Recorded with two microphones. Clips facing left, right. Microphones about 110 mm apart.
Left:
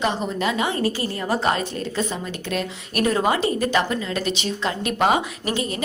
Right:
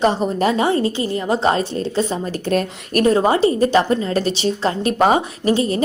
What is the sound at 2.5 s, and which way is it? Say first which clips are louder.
A woman's voice: right 8 dB; 45° right (ahead or behind).